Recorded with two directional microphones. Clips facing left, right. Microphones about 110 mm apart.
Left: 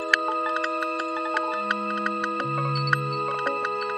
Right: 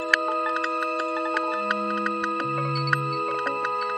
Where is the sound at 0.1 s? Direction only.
Centre (ahead or behind).